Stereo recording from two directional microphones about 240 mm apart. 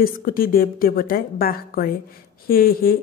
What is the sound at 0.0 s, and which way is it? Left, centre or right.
A woman's voice, left.